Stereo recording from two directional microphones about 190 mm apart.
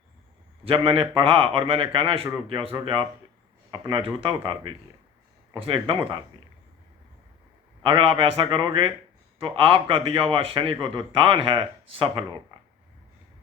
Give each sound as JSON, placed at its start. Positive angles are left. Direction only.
{"t": 0.6, "sound": "a man's voice", "side_deg": -25}
{"t": 7.8, "sound": "a man's voice", "side_deg": -25}